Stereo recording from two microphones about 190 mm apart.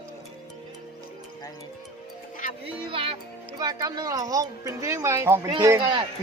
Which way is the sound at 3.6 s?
20° right (ahead or behind).